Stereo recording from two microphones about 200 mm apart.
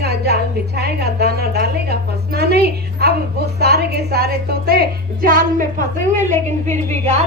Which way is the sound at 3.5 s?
50° right (ahead or behind).